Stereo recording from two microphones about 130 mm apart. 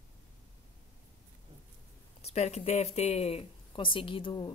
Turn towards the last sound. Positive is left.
turn(degrees=40)  # may be behind; listen again after turning